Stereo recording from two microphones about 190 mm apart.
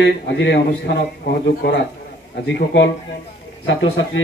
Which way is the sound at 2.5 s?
70° left (ahead or behind).